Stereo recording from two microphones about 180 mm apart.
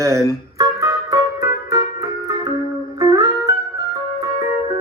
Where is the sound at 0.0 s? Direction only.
15° right (ahead or behind).